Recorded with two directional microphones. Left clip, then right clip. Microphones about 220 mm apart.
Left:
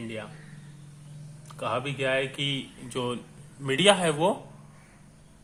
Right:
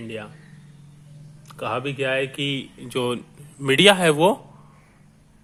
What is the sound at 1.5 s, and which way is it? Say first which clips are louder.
Speech: right 3 dB; 35° right (ahead or behind).